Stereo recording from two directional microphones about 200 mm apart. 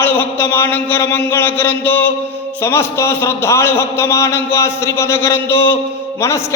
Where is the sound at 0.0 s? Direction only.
10° left (ahead or behind).